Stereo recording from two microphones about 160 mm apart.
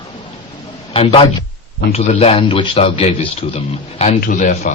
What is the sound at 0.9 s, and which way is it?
A man's voice, 35° left (ahead or behind).